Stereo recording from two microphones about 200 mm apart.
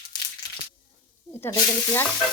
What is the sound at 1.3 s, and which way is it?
Snake, 10° left (ahead or behind).